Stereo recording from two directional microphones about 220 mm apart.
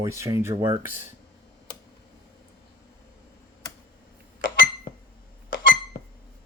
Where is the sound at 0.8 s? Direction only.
35° left (ahead or behind).